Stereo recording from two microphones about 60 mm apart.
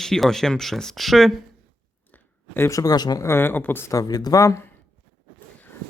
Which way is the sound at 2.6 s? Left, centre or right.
Left.